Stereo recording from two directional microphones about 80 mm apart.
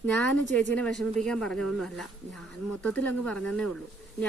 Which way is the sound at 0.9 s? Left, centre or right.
Centre.